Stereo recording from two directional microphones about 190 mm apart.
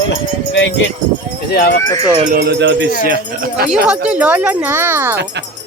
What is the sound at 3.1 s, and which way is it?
Speech, 50° right (ahead or behind).